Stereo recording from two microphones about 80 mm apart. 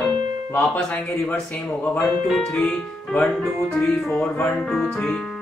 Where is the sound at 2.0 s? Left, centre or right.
Centre.